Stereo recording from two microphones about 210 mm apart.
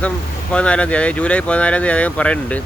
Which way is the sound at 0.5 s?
5° left (ahead or behind).